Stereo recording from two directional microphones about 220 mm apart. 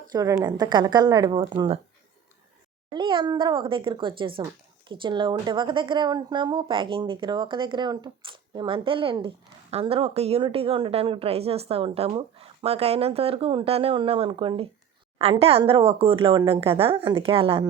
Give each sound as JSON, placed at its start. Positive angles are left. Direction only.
{"t": 0.1, "sound": "a woman's voice", "side_deg": -15}
{"t": 2.9, "sound": "a woman's voice", "side_deg": -20}